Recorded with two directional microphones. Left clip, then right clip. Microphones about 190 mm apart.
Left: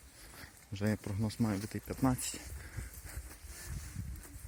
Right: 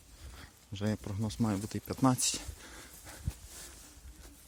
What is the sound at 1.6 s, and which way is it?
Speech, 25° right (ahead or behind).